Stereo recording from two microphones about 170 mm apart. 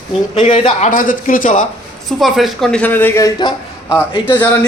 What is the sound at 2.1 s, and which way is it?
A woman's voice, centre (ahead or behind).